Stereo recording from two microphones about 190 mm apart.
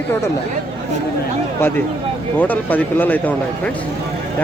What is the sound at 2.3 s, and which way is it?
Speech, 10° left (ahead or behind).